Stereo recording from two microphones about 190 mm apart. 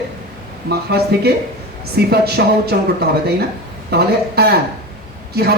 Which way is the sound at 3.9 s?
55° right (ahead or behind).